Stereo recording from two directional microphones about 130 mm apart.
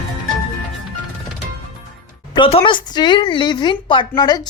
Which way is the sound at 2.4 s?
45° left (ahead or behind).